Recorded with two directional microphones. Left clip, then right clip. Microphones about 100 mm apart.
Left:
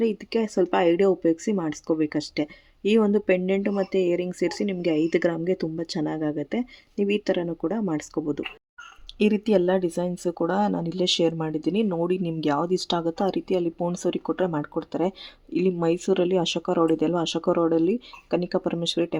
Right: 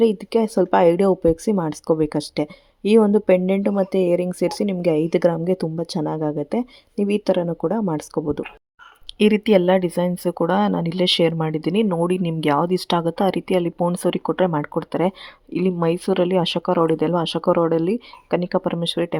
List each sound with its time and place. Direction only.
0.3 s speech: 40° right (ahead or behind)
9.1 s speech: 45° right (ahead or behind); by 19.2 s 25° right (ahead or behind)